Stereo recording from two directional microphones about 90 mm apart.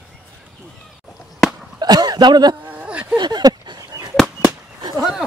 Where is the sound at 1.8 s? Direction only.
50° right (ahead or behind).